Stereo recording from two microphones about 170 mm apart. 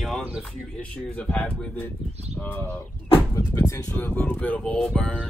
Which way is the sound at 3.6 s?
20° left (ahead or behind).